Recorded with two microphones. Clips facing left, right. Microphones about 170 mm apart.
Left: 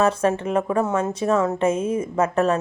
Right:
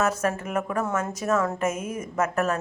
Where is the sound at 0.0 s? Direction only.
30° left (ahead or behind).